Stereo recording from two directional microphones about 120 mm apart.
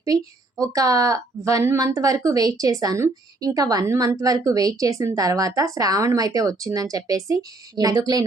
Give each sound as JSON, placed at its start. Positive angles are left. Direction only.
{"t": 0.6, "sound": "a woman's voice", "side_deg": -30}